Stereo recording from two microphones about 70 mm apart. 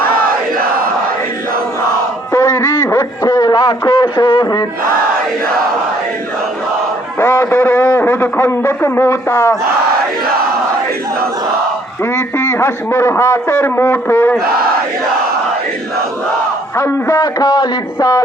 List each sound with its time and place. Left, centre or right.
2.4 s a sound: left
7.2 s a sound: left
9.3 s a man's voice: left
12.1 s a man's voice: left
16.7 s a man's voice: left
17.2 s a man's voice: left